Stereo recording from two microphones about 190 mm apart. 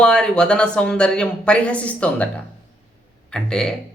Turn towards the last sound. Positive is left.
turn(degrees=5)  # may be behind; listen again after turning